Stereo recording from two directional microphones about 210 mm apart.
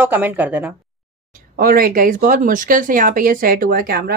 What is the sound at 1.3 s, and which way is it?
Speech, 45° right (ahead or behind).